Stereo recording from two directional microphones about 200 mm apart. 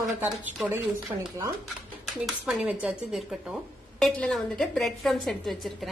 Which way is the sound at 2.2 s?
Centre (ahead or behind).